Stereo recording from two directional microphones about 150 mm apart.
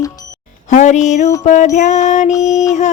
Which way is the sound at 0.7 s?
50° left (ahead or behind).